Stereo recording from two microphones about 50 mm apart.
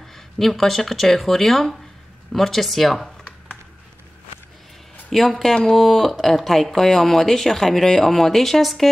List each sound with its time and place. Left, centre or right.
0.0 s speech: centre
5.1 s speech: centre